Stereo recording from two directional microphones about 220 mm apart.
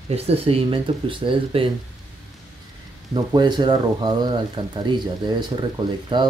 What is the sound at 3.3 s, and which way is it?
Speech, 20° right (ahead or behind).